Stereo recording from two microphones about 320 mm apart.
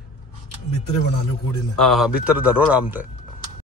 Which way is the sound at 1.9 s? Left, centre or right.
Centre.